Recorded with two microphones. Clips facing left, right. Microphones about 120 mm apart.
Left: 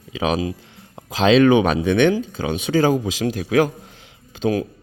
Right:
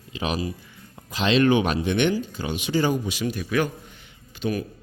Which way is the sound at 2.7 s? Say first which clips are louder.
Left 5 dB; 90° left.